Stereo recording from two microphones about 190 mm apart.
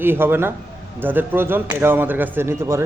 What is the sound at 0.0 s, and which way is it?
A man's voice, 10° right (ahead or behind).